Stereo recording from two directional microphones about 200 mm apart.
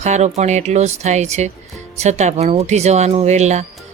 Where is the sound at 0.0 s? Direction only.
35° right (ahead or behind).